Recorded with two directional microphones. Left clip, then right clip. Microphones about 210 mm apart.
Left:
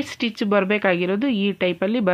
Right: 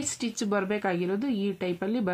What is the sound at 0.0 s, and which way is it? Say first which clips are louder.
Speech: left 7 dB; 35° left (ahead or behind).